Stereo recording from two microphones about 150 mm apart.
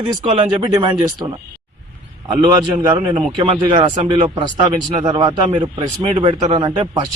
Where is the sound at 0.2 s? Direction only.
30° right (ahead or behind).